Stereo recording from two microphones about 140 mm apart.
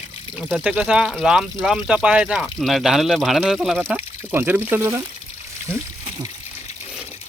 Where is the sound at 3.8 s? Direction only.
15° right (ahead or behind).